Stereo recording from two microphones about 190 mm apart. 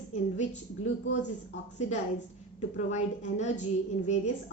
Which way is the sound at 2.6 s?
40° left (ahead or behind).